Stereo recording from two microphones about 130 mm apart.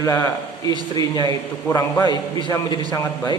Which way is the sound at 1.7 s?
15° left (ahead or behind).